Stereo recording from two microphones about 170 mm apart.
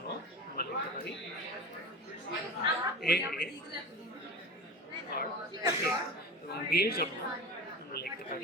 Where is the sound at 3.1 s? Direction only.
70° left (ahead or behind).